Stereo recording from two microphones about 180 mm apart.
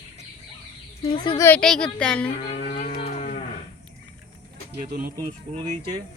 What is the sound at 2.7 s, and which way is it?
Cattle, 45° left (ahead or behind).